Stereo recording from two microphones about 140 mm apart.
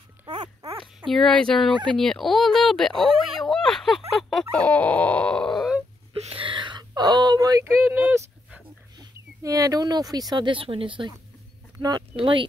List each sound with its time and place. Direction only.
0.3 s dog: 35° right (ahead or behind)
1.0 s speech: 5° left (ahead or behind)
3.3 s a sound: centre (ahead or behind)
4.2 s speech: centre (ahead or behind)
6.2 s a sound: 40° right (ahead or behind); by 7.7 s 25° right (ahead or behind)
7.8 s dog: 15° right (ahead or behind)
8.9 s speech: 25° right (ahead or behind)